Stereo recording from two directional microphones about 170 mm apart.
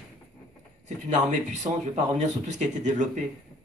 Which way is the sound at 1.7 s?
35° right (ahead or behind).